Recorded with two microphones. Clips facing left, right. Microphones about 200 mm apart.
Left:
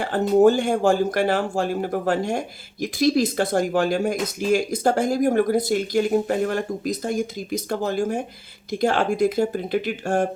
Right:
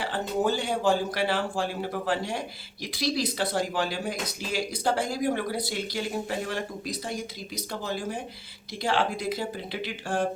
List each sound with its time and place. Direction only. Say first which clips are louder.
0.0 s speech: left 11 dB; 45° left (ahead or behind)